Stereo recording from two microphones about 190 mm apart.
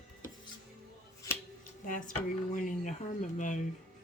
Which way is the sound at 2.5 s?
40° left (ahead or behind).